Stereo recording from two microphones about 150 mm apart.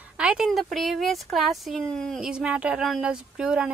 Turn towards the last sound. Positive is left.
turn(degrees=-5)  # may be behind; listen again after turning